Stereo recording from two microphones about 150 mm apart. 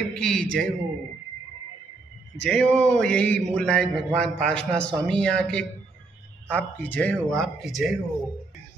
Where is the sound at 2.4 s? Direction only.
5° left (ahead or behind).